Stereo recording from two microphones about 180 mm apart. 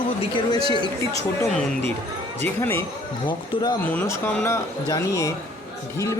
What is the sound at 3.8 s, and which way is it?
Speech, 10° left (ahead or behind).